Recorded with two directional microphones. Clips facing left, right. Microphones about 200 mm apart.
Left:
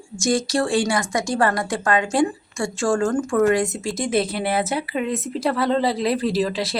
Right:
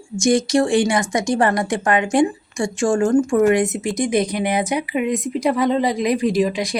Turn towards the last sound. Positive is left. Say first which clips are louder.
# right 3 dB
turn(degrees=-15)  # may be behind; listen again after turning